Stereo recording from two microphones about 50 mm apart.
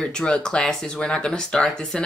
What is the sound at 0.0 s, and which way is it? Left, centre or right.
Speech, centre.